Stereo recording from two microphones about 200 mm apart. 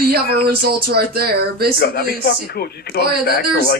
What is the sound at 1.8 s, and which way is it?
A man's voice, 55° left (ahead or behind).